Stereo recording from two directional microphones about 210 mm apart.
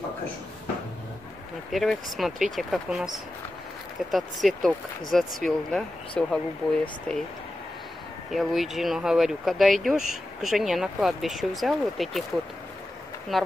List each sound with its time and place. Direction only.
1.7 s speech: centre (ahead or behind)
4.1 s speech: centre (ahead or behind)
8.3 s speech: centre (ahead or behind)
13.3 s speech: centre (ahead or behind)